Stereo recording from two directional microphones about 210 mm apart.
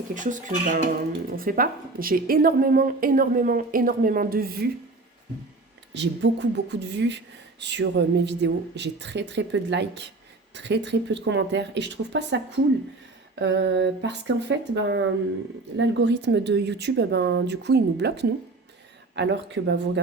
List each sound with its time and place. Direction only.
0.1 s a woman's voice: 35° right (ahead or behind)
5.9 s a woman's voice: 55° right (ahead or behind)